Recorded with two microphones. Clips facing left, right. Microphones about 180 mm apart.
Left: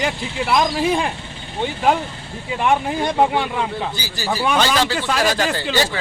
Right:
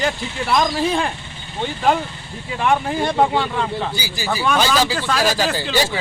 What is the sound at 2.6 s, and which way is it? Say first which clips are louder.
Speech: even; 10° left (ahead or behind).